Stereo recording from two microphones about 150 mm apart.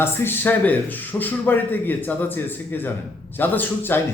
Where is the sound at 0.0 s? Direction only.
15° left (ahead or behind).